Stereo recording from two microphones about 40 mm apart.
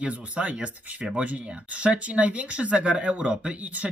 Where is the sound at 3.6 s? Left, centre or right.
Right.